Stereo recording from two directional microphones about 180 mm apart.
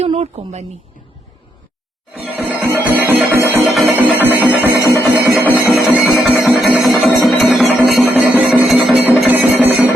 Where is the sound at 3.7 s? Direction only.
Centre (ahead or behind).